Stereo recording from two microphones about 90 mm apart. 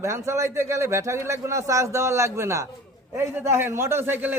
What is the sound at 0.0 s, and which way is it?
A man's voice, 30° right (ahead or behind).